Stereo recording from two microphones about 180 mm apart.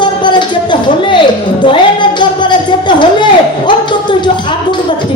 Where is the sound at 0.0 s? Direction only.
25° left (ahead or behind).